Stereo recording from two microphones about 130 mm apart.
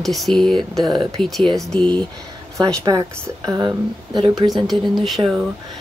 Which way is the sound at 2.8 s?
30° right (ahead or behind).